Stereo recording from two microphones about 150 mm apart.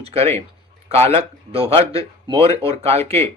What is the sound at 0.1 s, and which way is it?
A man's voice, 40° right (ahead or behind).